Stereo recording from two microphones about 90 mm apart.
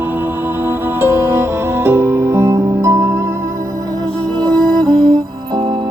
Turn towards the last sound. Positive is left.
turn(degrees=-55)  # may be behind; listen again after turning